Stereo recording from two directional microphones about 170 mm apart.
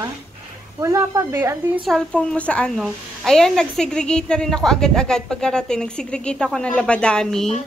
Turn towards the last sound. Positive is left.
turn(degrees=5)  # may be behind; listen again after turning